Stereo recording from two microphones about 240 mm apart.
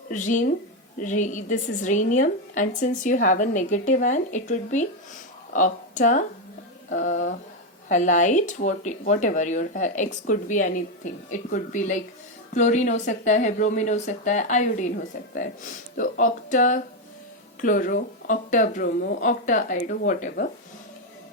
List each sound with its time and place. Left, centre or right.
0.1 s speech: left